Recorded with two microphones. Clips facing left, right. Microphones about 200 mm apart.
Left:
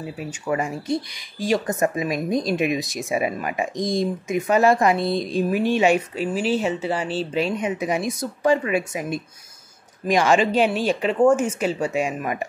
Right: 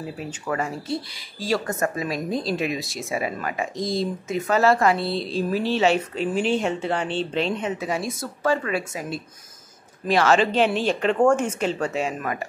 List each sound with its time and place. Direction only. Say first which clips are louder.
0.0 s speech: left 1 dB; 5° left (ahead or behind)
0.5 s speech: left 3 dB; 15° left (ahead or behind)